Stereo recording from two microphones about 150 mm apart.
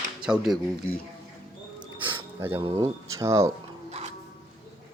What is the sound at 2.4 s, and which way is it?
Speech, 15° right (ahead or behind).